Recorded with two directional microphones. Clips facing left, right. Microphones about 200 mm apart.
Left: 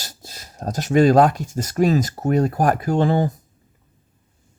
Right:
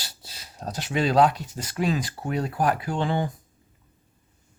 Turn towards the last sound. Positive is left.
turn(degrees=40)  # may be behind; listen again after turning